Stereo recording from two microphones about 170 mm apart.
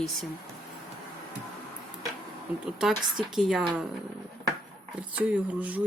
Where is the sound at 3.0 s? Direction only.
5° right (ahead or behind).